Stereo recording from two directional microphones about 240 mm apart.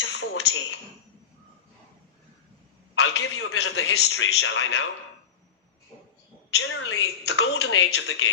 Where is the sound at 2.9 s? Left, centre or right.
Left.